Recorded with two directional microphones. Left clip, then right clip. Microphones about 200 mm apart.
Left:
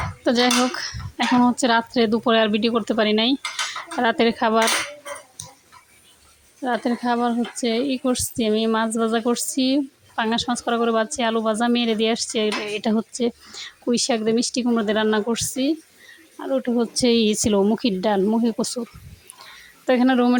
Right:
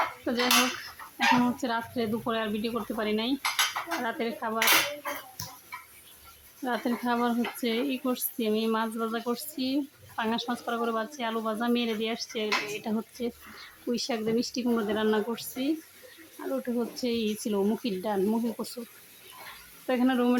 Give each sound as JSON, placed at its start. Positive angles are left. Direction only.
{"t": 0.3, "sound": "dishes", "side_deg": 35}
{"t": 1.5, "sound": "a woman's voice", "side_deg": 40}
{"t": 6.6, "sound": "a woman's voice", "side_deg": 30}
{"t": 19.9, "sound": "a woman's voice", "side_deg": 30}